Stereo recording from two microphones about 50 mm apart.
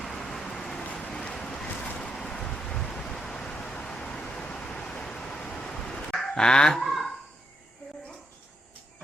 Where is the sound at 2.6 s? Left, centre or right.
Centre.